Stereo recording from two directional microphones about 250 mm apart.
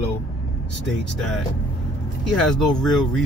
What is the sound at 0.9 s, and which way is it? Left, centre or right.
Speech, centre.